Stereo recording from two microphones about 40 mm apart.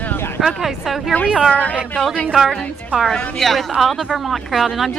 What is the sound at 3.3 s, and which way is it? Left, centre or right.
Speech, centre.